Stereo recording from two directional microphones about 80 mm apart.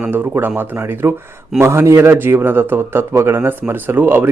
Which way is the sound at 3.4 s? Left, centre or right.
Right.